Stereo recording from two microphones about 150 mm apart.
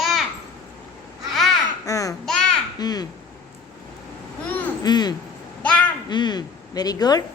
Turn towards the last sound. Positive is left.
turn(degrees=25)  # may be behind; listen again after turning